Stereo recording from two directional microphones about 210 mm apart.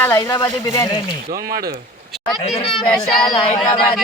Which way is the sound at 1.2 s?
45° right (ahead or behind).